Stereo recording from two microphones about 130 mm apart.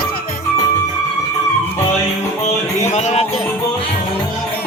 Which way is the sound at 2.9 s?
60° left (ahead or behind).